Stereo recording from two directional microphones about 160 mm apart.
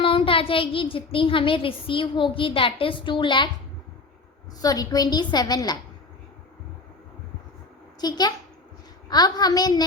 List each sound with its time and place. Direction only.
0.0 s a child's voice: 35° left (ahead or behind)
4.6 s a woman's voice: 25° left (ahead or behind)
8.0 s a woman's voice: 25° left (ahead or behind)